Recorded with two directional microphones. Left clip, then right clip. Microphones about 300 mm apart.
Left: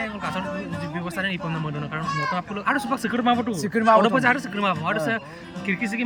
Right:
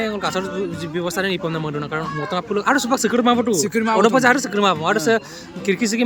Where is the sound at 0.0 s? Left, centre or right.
Centre.